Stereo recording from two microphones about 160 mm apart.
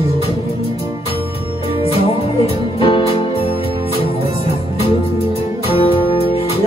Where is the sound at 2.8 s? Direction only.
35° left (ahead or behind).